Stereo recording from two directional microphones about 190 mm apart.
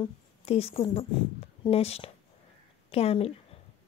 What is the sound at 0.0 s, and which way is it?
A woman's voice, 30° left (ahead or behind).